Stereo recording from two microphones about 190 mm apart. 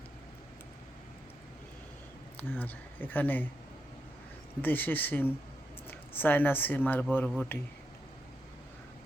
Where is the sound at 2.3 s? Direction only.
10° left (ahead or behind).